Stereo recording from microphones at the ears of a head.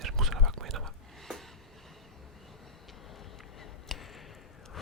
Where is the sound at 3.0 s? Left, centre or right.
Left.